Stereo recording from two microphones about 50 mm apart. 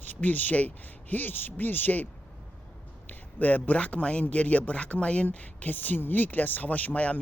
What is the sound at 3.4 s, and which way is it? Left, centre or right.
Speech, left.